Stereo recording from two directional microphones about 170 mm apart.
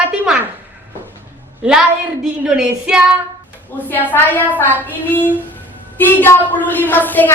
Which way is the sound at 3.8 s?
10° left (ahead or behind).